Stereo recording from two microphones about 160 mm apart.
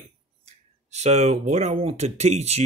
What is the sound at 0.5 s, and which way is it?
Speech, 45° right (ahead or behind).